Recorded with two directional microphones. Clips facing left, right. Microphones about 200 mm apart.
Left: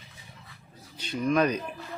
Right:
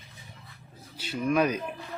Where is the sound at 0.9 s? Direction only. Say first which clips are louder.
Left 1 dB; 5° right (ahead or behind).